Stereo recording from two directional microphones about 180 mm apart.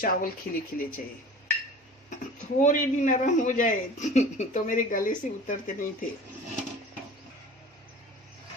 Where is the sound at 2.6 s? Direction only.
45° left (ahead or behind).